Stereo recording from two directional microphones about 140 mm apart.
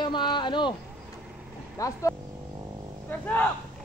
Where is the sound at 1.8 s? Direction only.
20° left (ahead or behind).